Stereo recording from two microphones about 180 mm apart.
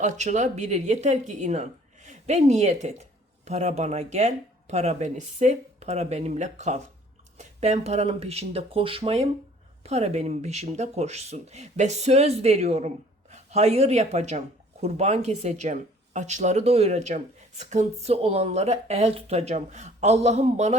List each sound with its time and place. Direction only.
0.0 s speech: 40° right (ahead or behind)